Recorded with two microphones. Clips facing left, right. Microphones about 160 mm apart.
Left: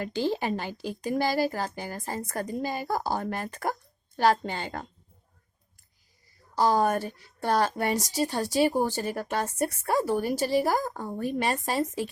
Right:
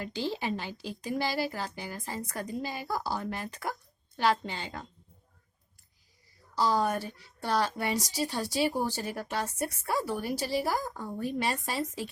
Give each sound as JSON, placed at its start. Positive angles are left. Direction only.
{"t": 0.0, "sound": "a woman's voice", "side_deg": 50}
{"t": 6.6, "sound": "a woman's voice", "side_deg": 50}